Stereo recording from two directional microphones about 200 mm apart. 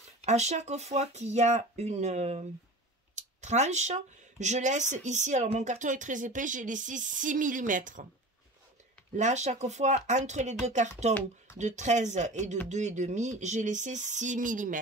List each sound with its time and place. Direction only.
0.2 s speech: 35° right (ahead or behind)
9.1 s speech: 35° right (ahead or behind)